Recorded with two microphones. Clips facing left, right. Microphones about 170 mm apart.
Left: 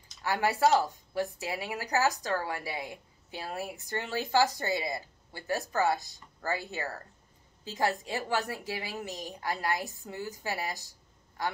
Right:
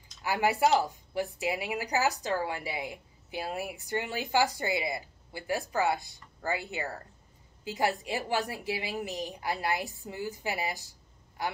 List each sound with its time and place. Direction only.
0.2 s speech: 15° right (ahead or behind)